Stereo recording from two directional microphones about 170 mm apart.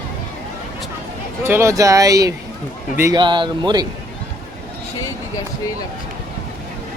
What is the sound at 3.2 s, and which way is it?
Speech, 25° right (ahead or behind).